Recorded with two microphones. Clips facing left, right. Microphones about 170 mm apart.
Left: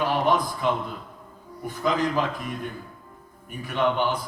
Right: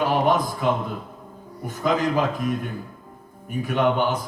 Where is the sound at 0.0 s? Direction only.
45° right (ahead or behind).